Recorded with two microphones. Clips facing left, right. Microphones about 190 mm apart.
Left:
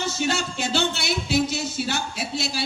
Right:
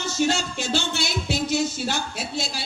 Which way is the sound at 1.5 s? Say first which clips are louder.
Right 3 dB; 60° right (ahead or behind).